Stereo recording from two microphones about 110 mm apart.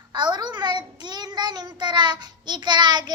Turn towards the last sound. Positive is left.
turn(degrees=-40)  # may be behind; listen again after turning